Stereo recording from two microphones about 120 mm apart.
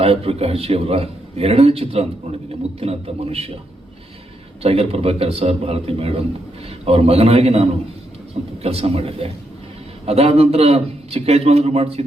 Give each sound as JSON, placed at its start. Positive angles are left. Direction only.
{"t": 0.0, "sound": "a man's voice", "side_deg": -55}
{"t": 4.6, "sound": "a man's voice", "side_deg": -55}